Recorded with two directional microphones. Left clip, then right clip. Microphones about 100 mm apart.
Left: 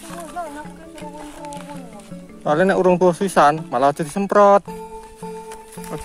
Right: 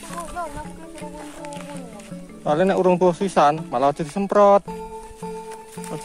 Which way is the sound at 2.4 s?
70° left (ahead or behind).